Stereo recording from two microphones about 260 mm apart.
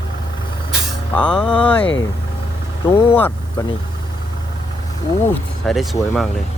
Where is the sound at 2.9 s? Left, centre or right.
Centre.